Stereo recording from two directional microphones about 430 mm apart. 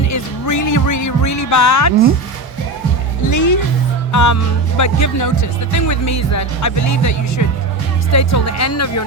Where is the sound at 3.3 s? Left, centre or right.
Left.